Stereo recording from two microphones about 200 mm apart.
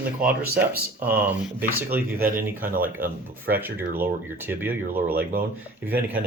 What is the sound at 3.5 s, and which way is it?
Speech, 55° right (ahead or behind).